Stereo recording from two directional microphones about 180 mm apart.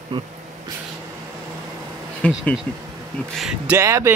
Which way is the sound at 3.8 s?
15° right (ahead or behind).